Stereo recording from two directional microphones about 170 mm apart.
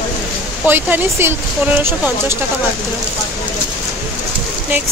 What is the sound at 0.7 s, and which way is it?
Speech, 10° right (ahead or behind).